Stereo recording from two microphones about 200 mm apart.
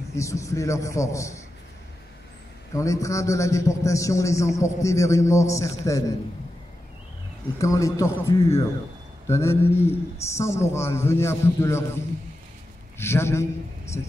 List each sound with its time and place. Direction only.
0.1 s a man's voice: 15° left (ahead or behind)
2.7 s a man's voice: 15° left (ahead or behind)
7.5 s a man's voice: 15° left (ahead or behind)